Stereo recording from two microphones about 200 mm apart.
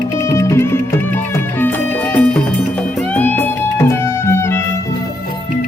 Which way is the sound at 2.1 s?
5° left (ahead or behind).